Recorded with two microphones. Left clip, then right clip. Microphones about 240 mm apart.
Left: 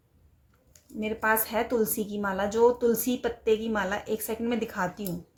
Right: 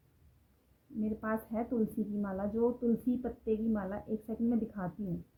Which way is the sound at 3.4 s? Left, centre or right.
Centre.